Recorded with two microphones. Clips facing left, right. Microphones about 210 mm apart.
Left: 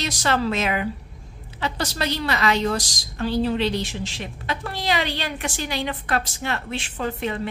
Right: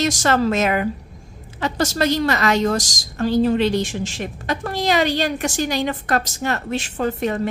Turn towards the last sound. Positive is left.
turn(degrees=-45)  # may be behind; listen again after turning